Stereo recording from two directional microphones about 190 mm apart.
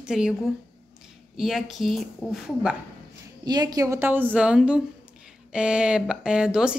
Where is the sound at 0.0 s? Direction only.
5° right (ahead or behind).